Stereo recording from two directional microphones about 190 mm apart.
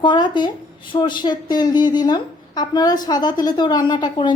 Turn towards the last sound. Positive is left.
turn(degrees=25)  # may be behind; listen again after turning